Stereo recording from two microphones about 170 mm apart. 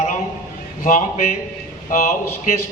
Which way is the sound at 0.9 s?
50° left (ahead or behind).